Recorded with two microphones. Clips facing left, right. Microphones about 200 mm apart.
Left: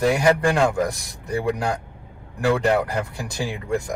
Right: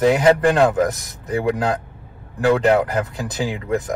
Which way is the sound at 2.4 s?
20° right (ahead or behind).